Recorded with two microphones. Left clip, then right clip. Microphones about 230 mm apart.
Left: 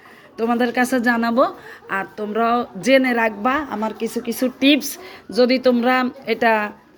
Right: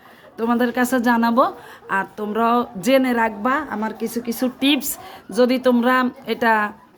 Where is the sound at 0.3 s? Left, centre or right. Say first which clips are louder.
Left 1 dB; centre.